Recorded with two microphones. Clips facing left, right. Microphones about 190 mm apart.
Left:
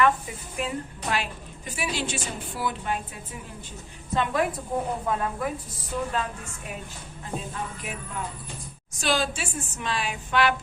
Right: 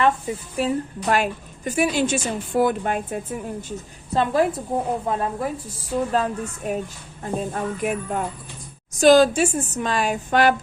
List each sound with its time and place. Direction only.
0.5 s a woman's voice: 40° right (ahead or behind)
4.1 s a woman's voice: 35° right (ahead or behind)
7.2 s a woman's voice: 50° right (ahead or behind)